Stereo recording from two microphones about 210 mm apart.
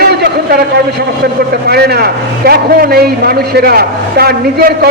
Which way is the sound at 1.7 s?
50° right (ahead or behind).